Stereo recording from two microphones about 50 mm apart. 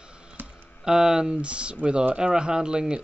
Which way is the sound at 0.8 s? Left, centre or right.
Centre.